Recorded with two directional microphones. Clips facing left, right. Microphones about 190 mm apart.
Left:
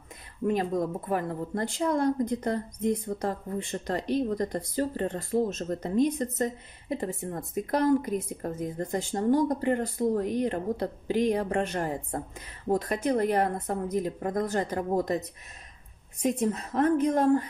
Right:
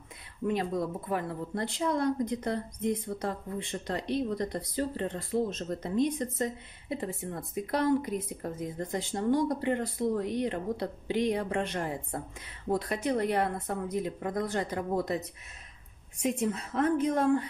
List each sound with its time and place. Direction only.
0.5 s speech: 45° left (ahead or behind)
16.2 s speech: 40° left (ahead or behind)